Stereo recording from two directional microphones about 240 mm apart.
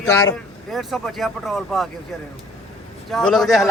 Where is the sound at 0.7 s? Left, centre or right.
Centre.